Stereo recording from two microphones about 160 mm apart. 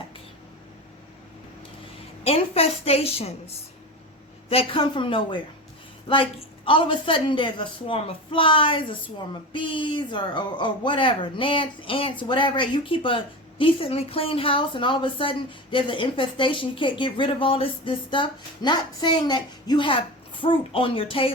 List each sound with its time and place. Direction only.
2.2 s speech: 40° left (ahead or behind)
6.7 s speech: 30° left (ahead or behind)